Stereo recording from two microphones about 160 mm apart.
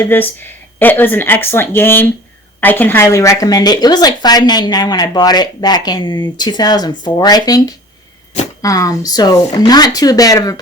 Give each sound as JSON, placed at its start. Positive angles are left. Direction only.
{"t": 0.1, "sound": "speech", "side_deg": 10}